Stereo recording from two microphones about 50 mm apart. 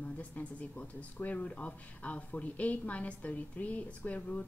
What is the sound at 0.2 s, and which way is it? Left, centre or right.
Speech, left.